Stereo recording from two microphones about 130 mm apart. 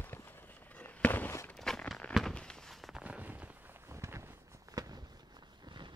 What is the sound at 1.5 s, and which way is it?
Walk, 5° left (ahead or behind).